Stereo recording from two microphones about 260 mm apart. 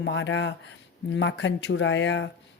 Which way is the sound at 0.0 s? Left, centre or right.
Left.